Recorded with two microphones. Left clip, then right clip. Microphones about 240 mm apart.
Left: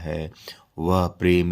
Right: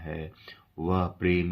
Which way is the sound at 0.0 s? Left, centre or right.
Left.